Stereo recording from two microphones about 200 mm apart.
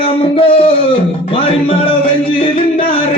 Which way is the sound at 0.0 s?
25° left (ahead or behind).